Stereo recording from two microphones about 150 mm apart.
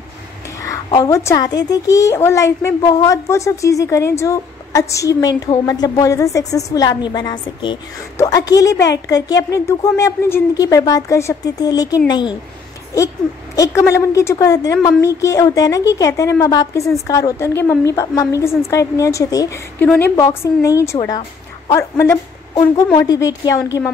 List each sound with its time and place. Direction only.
0.8 s a woman's voice: 25° left (ahead or behind)
13.6 s a woman's voice: 20° left (ahead or behind)